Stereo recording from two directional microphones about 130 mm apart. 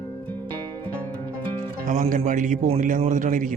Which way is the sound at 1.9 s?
90° right.